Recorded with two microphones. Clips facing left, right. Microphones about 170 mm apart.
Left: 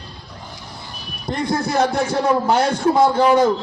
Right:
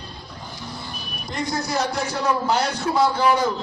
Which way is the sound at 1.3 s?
55° left (ahead or behind).